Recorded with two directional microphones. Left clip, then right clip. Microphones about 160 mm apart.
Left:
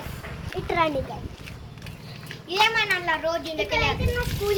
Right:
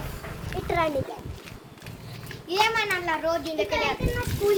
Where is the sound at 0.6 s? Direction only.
55° left (ahead or behind).